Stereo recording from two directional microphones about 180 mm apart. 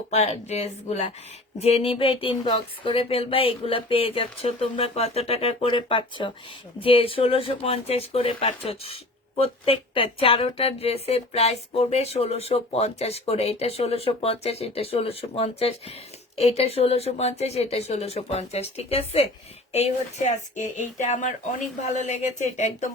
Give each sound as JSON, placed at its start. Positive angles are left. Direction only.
{"t": 0.1, "sound": "speech", "side_deg": 35}